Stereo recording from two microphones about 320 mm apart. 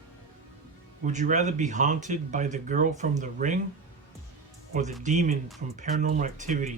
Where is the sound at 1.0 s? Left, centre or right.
Right.